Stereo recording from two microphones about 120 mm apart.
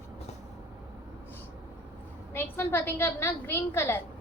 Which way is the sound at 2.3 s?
20° left (ahead or behind).